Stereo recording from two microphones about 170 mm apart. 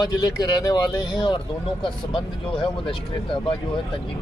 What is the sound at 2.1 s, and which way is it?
Speech, 30° left (ahead or behind).